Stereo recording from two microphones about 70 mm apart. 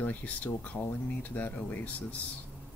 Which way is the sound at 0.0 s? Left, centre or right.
Left.